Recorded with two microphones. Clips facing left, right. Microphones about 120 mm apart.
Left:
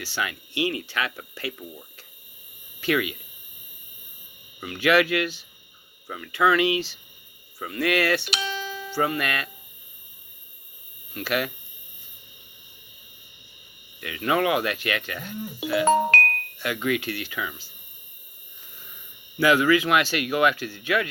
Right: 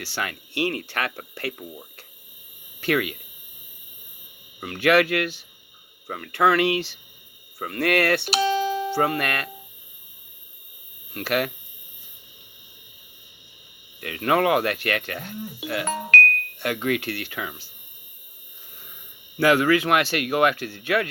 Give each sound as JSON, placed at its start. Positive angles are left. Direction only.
{"t": 0.0, "sound": "speech", "side_deg": -60}
{"t": 2.8, "sound": "speech", "side_deg": -55}
{"t": 4.6, "sound": "speech", "side_deg": -60}
{"t": 8.3, "sound": "music", "side_deg": -40}
{"t": 8.9, "sound": "speech", "side_deg": -60}
{"t": 11.1, "sound": "speech", "side_deg": -60}
{"t": 14.0, "sound": "speech", "side_deg": -55}
{"t": 15.9, "sound": "music", "side_deg": 30}
{"t": 16.6, "sound": "speech", "side_deg": -55}
{"t": 19.4, "sound": "speech", "side_deg": -60}